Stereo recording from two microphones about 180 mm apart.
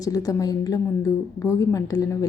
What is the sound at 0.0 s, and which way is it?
A woman's voice, 20° left (ahead or behind).